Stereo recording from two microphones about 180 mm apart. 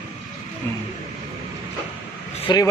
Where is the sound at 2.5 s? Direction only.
25° left (ahead or behind).